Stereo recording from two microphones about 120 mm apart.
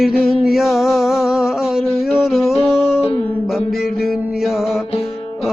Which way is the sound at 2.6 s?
55° left (ahead or behind).